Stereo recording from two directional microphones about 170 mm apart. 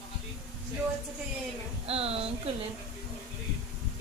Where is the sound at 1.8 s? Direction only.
35° right (ahead or behind).